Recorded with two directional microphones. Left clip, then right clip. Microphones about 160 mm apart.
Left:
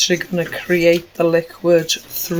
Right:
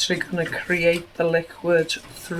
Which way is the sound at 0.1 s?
55° left (ahead or behind).